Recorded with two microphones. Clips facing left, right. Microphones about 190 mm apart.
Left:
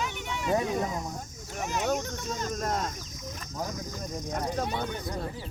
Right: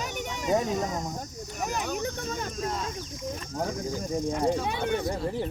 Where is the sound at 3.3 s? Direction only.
30° right (ahead or behind).